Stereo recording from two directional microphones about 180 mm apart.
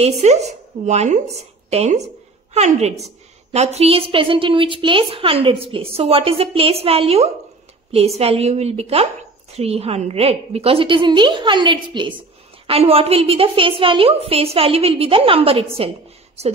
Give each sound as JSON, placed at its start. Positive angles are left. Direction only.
{"t": 0.0, "sound": "a woman's voice", "side_deg": -40}